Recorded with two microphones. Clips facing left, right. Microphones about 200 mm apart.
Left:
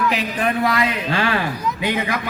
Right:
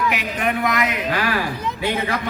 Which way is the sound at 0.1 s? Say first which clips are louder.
Left 2 dB; 30° left (ahead or behind).